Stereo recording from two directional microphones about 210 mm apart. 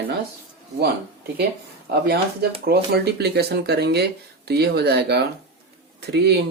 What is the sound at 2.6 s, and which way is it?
Speech, 50° right (ahead or behind).